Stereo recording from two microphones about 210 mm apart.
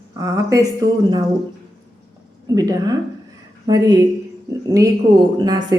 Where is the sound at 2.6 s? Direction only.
20° right (ahead or behind).